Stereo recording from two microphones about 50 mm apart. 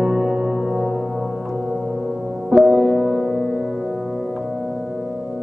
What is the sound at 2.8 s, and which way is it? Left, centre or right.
Music, right.